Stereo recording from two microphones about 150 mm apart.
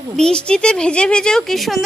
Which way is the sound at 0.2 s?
5° left (ahead or behind).